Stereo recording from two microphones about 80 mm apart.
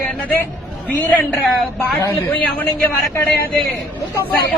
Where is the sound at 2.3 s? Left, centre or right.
Left.